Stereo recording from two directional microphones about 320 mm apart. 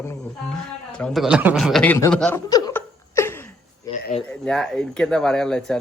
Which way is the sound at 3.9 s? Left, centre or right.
Left.